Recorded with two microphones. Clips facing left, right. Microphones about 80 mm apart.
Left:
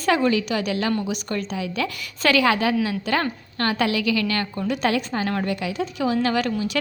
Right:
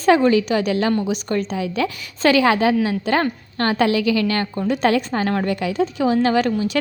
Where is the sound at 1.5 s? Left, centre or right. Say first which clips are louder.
Right 4 dB; right.